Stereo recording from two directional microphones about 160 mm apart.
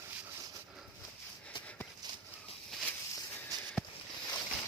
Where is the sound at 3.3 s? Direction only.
10° left (ahead or behind).